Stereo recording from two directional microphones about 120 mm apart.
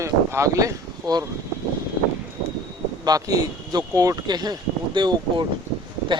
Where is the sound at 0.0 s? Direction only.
25° right (ahead or behind).